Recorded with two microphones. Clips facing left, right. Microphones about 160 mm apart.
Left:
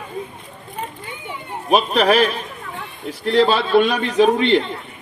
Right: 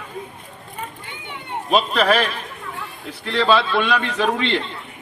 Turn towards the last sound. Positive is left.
turn(degrees=45)  # may be behind; listen again after turning